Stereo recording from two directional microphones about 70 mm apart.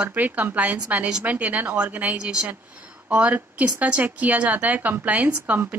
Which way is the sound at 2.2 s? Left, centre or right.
Centre.